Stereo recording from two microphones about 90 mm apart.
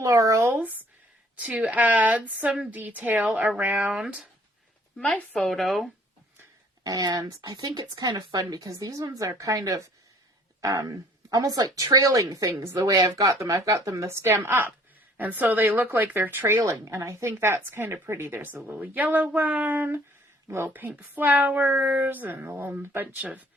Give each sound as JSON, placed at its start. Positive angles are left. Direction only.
{"t": 0.0, "sound": "a sound", "side_deg": -40}
{"t": 0.5, "sound": "a woman's voice", "side_deg": -20}
{"t": 5.0, "sound": "speech", "side_deg": 15}
{"t": 5.5, "sound": "speech", "side_deg": 0}
{"t": 6.8, "sound": "a woman's voice", "side_deg": -45}
{"t": 16.6, "sound": "a woman's voice", "side_deg": -35}